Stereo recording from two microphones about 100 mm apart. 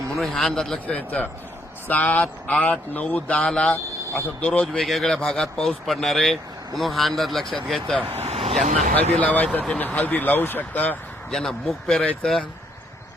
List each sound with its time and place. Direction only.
0.2 s speech: 5° left (ahead or behind)
0.9 s speech: 15° left (ahead or behind)
8.0 s vehicle: 85° right
9.1 s speech: 15° left (ahead or behind)
11.3 s speech: 5° left (ahead or behind)